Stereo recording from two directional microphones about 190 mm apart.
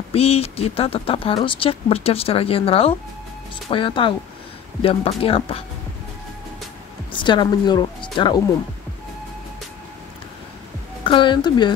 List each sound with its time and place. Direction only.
0.1 s speech: 30° left (ahead or behind)
7.1 s speech: 25° left (ahead or behind)
11.1 s speech: 25° left (ahead or behind)